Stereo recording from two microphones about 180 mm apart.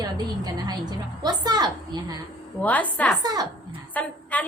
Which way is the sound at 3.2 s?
20° right (ahead or behind).